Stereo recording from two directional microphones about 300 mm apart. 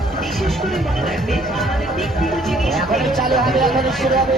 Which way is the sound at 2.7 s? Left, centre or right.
Centre.